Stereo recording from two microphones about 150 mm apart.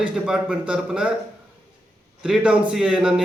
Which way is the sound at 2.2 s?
5° right (ahead or behind).